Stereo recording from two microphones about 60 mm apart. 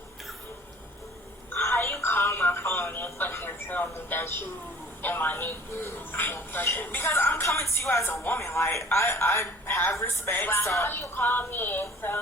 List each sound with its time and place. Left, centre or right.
1.5 s a sound: left
4.1 s speech: left
8.0 s speech: left
8.4 s speech: left
10.3 s speech: left